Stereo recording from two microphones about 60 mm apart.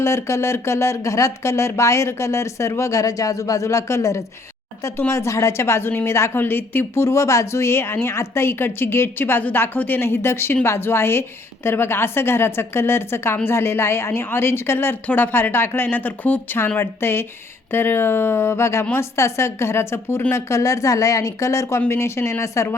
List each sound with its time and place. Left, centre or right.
0.0 s a woman's voice: left
15.0 s a woman's voice: left
20.3 s speech: left
21.8 s a woman's voice: left